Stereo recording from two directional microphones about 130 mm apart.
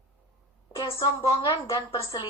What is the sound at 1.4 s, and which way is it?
Speech, 30° left (ahead or behind).